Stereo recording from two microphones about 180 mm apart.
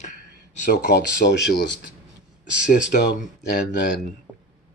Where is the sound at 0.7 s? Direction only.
65° left (ahead or behind).